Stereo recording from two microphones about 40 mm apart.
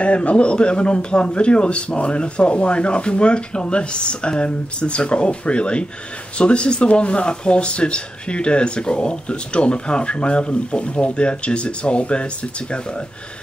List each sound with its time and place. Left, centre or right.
0.0 s speech: left